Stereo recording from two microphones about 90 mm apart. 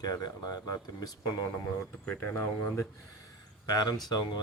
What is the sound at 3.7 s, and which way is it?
Speech, 50° left (ahead or behind).